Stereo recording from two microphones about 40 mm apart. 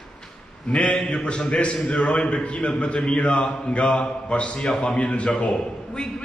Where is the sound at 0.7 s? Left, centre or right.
Left.